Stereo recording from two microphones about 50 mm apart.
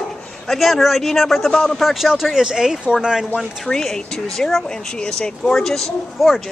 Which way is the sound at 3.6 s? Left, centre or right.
Centre.